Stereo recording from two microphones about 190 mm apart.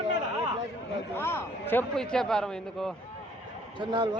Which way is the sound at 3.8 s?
25° right (ahead or behind).